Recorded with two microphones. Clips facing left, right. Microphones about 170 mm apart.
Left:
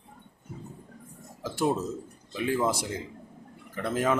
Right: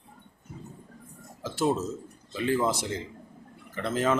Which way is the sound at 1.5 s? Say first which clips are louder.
Right 1 dB; 15° left (ahead or behind).